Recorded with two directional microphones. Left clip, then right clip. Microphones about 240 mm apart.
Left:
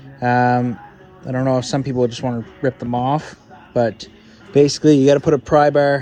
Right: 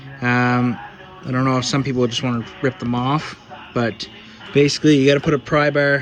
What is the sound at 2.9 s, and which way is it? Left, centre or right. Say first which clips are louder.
Speech: left 3 dB; centre.